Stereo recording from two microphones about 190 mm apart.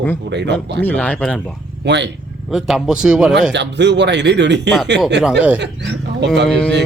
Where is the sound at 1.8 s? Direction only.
65° right (ahead or behind).